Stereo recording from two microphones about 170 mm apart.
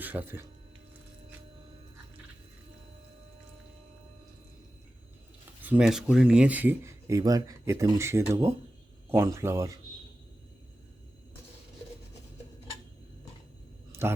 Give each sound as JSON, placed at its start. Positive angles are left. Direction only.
{"t": 0.0, "sound": "speech", "side_deg": -10}
{"t": 5.6, "sound": "speech", "side_deg": -5}